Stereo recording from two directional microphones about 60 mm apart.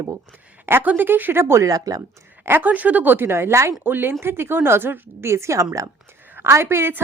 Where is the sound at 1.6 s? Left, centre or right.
Right.